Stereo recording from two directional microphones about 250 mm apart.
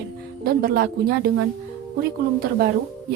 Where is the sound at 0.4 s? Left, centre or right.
Right.